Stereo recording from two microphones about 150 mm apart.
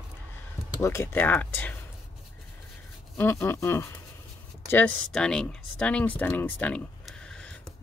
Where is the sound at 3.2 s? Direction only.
15° left (ahead or behind).